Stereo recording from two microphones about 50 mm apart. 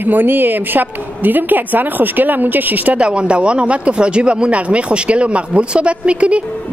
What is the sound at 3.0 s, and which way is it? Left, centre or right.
Speech, right.